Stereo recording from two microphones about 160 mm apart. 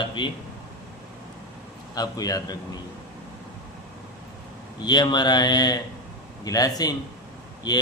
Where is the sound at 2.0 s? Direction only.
25° left (ahead or behind).